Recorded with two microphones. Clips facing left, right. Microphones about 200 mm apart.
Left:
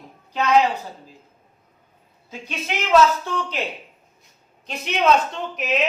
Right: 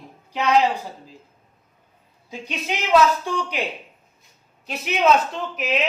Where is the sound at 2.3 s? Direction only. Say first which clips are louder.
Right 1 dB; 15° right (ahead or behind).